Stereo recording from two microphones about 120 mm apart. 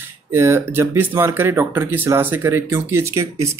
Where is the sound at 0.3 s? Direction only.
20° right (ahead or behind).